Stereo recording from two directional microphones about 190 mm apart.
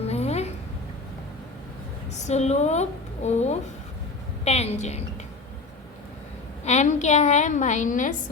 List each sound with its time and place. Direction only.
0.1 s a sound: 35° left (ahead or behind)
2.1 s a woman's voice: 35° left (ahead or behind)
6.7 s a woman's voice: 35° left (ahead or behind)